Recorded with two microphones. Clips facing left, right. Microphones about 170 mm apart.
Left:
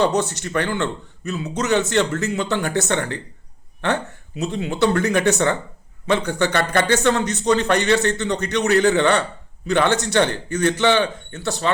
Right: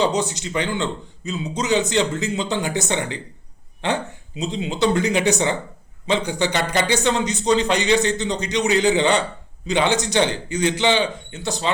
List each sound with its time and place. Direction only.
0.0 s a man's voice: 10° right (ahead or behind)